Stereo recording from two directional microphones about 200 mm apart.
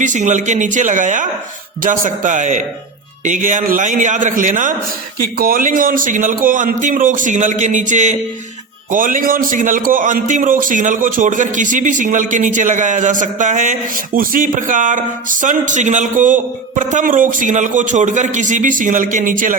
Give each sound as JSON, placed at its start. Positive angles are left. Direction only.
{"t": 0.0, "sound": "a man's voice", "side_deg": -40}